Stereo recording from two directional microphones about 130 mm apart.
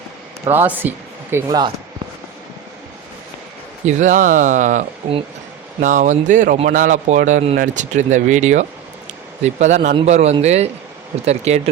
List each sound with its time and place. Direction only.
0.5 s speech: 15° right (ahead or behind)
1.5 s speech: 30° right (ahead or behind)
3.8 s speech: 75° right (ahead or behind)
6.7 s speech: 90° right; by 11.7 s 55° right (ahead or behind)